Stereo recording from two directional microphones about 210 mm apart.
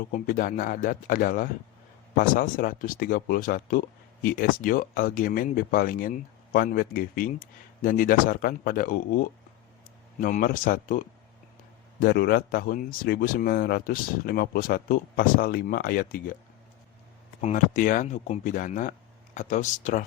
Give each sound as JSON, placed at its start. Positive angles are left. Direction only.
{"t": 0.1, "sound": "speech", "side_deg": 40}
{"t": 10.2, "sound": "speech", "side_deg": 40}
{"t": 17.4, "sound": "speech", "side_deg": 40}